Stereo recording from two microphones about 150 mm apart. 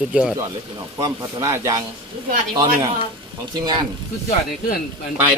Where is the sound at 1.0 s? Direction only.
20° right (ahead or behind).